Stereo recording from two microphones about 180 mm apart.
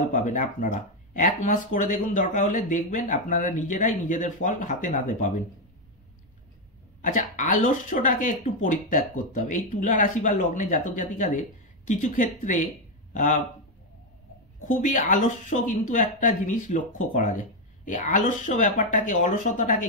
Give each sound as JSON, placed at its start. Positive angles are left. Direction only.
{"t": 0.0, "sound": "speech", "side_deg": 45}
{"t": 7.0, "sound": "a man's voice", "side_deg": 45}
{"t": 14.7, "sound": "speech", "side_deg": 45}